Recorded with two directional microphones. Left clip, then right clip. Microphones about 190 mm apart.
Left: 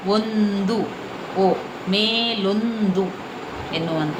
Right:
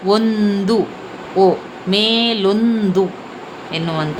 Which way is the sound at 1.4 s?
65° right (ahead or behind).